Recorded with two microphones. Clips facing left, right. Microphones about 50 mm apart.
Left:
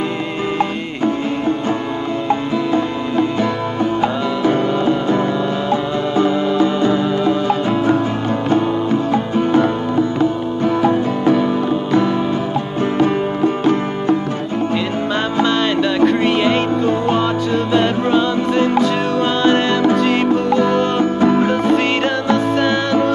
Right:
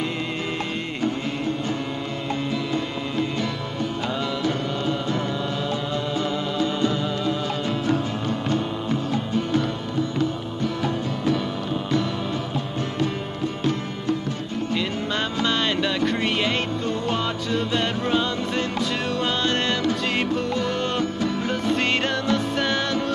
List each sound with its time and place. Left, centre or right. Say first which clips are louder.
2.2 s music: left 8 dB; left
9.1 s music: left 8 dB; left
13.0 s music: left 12 dB; left
16.1 s music: left 8 dB; centre
21.0 s music: left 11 dB; left
21.7 s music: left 7 dB; centre